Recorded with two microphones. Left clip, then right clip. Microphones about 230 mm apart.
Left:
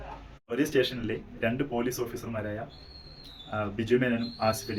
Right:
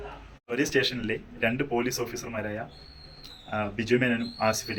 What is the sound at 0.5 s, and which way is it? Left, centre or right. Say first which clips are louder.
A man's voice: right 1 dB; centre.